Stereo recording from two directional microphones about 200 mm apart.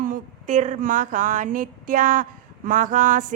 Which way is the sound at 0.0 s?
40° right (ahead or behind).